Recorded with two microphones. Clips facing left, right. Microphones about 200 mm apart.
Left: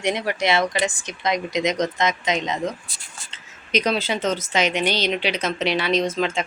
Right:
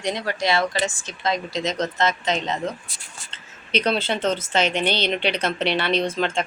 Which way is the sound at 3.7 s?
10° left (ahead or behind).